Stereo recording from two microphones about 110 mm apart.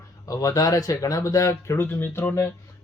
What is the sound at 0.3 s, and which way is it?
Speech, 35° left (ahead or behind).